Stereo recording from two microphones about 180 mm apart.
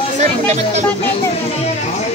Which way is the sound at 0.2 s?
40° right (ahead or behind).